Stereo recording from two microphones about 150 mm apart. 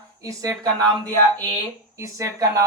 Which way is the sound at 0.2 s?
20° right (ahead or behind).